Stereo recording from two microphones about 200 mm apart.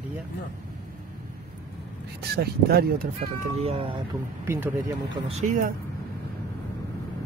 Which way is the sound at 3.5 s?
30° right (ahead or behind).